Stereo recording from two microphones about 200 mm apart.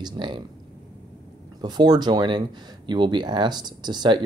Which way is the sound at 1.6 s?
20° right (ahead or behind).